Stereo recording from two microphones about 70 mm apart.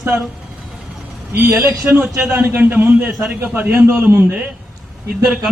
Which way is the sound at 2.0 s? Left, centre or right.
Centre.